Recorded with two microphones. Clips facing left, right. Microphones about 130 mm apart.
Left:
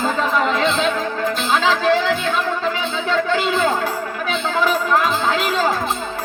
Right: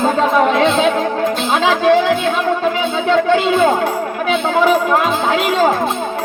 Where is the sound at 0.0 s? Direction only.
25° right (ahead or behind).